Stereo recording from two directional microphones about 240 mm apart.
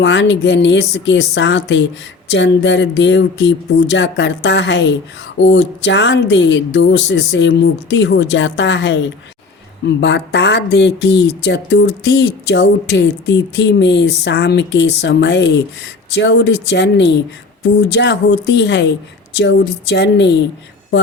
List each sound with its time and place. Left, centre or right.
0.0 s speech: left